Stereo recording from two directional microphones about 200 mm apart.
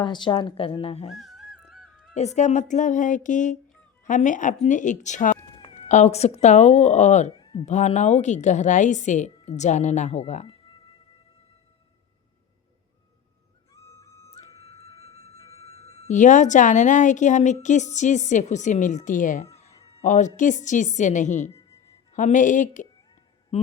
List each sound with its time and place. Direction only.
0.0 s speech: 25° left (ahead or behind)
1.1 s music: centre (ahead or behind)
2.1 s speech: 35° left (ahead or behind)
5.5 s cat: 25° left (ahead or behind)
5.9 s speech: 35° left (ahead or behind)
14.0 s music: 15° left (ahead or behind)
14.4 s music: 30° left (ahead or behind)
15.5 s speech: 30° left (ahead or behind)